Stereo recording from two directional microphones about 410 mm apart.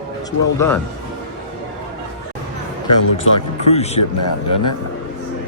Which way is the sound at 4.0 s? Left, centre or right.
Left.